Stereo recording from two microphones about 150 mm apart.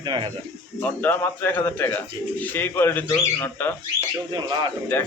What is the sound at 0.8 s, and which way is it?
Speech, 15° left (ahead or behind).